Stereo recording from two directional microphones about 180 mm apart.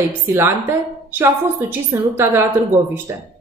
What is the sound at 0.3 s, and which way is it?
A woman's voice, 15° right (ahead or behind).